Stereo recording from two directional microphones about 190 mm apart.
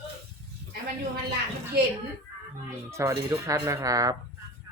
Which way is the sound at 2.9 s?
15° right (ahead or behind).